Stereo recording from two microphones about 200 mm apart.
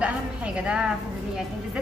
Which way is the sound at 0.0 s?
5° right (ahead or behind).